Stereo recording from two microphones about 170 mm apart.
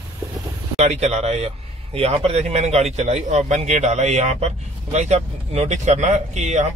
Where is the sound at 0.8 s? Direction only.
40° right (ahead or behind).